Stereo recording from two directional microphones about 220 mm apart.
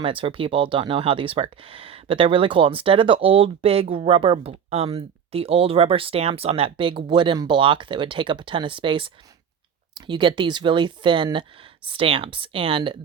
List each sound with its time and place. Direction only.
0.0 s speech: 25° right (ahead or behind)